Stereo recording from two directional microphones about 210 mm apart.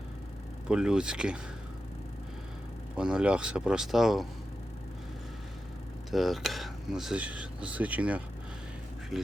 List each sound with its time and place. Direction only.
0.7 s speech: 5° right (ahead or behind)
2.9 s speech: 5° right (ahead or behind)
6.1 s speech: centre (ahead or behind)